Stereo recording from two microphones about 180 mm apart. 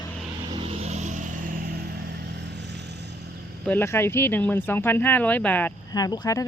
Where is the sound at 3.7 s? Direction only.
10° left (ahead or behind).